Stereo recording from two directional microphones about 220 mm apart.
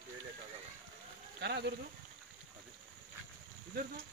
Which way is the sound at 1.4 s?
50° right (ahead or behind).